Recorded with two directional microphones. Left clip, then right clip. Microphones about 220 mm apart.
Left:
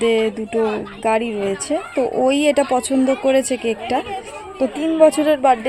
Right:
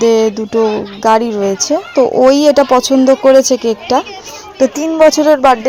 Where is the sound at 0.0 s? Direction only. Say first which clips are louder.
Right 7 dB; 25° right (ahead or behind).